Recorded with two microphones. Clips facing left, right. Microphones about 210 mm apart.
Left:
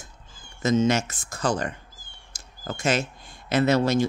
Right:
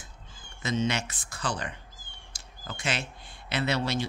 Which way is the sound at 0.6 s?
45° left (ahead or behind).